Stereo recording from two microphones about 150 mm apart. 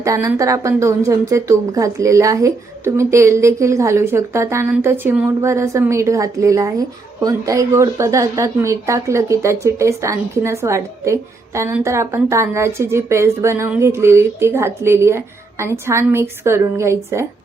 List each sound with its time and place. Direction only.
0.0 s a woman's voice: 20° right (ahead or behind)